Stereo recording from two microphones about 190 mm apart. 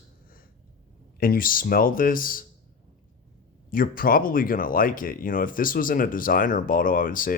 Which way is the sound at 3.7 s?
45° left (ahead or behind).